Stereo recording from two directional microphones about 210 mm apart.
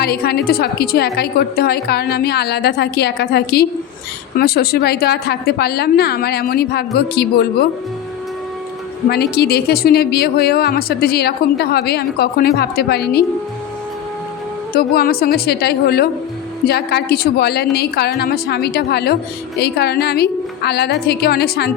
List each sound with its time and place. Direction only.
0.0 s a woman's voice: 50° left (ahead or behind)
9.0 s a woman's voice: 50° left (ahead or behind)
14.7 s a woman's voice: 45° left (ahead or behind)